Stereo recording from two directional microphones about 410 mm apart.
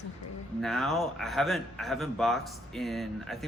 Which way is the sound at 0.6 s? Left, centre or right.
Centre.